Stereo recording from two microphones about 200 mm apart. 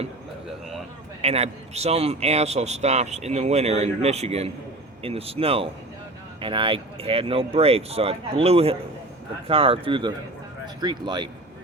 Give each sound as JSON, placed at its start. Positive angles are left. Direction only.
{"t": 1.2, "sound": "speech", "side_deg": -30}